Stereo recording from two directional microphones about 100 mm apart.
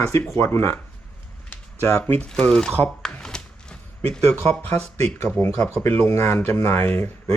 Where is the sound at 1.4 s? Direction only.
20° left (ahead or behind).